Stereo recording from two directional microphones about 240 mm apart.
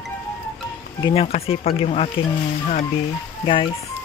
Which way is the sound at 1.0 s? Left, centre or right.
Left.